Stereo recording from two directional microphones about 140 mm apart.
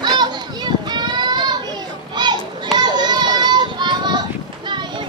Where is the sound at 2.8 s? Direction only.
30° right (ahead or behind).